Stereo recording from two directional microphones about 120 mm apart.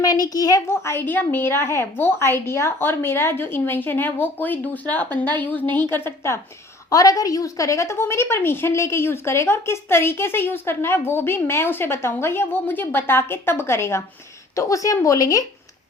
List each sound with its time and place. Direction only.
0.0 s a child's voice: 30° left (ahead or behind)
0.7 s a woman's voice: 20° left (ahead or behind)